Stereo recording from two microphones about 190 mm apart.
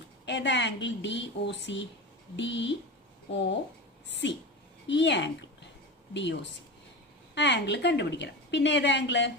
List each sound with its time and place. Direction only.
0.3 s a woman's voice: 70° left (ahead or behind)